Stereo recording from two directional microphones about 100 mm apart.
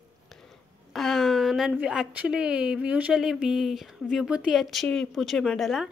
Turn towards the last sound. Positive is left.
turn(degrees=0)  # may be behind; listen again after turning